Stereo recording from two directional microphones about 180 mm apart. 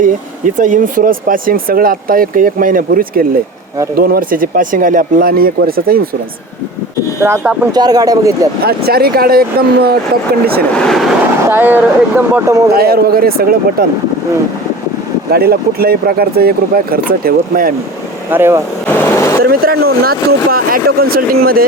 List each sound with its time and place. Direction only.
0.0 s speech: 45° right (ahead or behind)
7.2 s speech: 15° right (ahead or behind)
8.6 s speech: 60° right (ahead or behind)
10.8 s speech: centre (ahead or behind)
11.4 s speech: 10° right (ahead or behind)
12.7 s speech: 60° right (ahead or behind)
15.3 s speech: 60° right (ahead or behind)
18.3 s speech: 10° right (ahead or behind)
18.9 s vehicle: 15° left (ahead or behind)
19.4 s speech: 60° right (ahead or behind)